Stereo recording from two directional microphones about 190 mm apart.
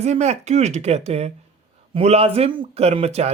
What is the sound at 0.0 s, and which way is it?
Speech, 35° right (ahead or behind).